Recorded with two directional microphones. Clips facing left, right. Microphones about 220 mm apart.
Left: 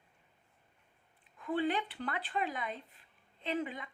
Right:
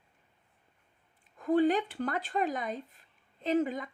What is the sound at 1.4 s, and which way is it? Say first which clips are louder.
Speech: right 7 dB; 40° right (ahead or behind).